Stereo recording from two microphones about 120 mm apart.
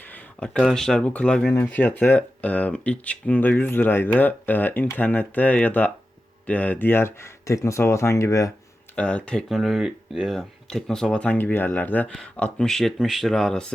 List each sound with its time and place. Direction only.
0.1 s speech: 10° left (ahead or behind); by 8.5 s 25° left (ahead or behind)
9.0 s speech: 10° left (ahead or behind)